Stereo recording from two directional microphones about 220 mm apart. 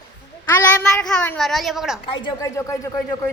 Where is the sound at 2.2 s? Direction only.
15° left (ahead or behind).